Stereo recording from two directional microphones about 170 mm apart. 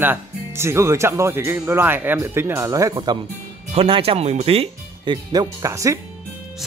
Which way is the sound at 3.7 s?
35° right (ahead or behind).